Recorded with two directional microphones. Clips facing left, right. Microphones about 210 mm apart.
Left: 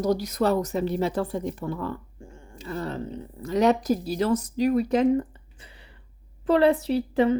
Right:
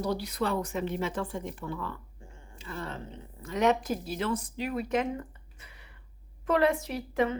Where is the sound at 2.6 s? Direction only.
40° left (ahead or behind).